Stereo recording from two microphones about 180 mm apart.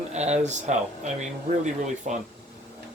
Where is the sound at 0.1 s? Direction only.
40° right (ahead or behind).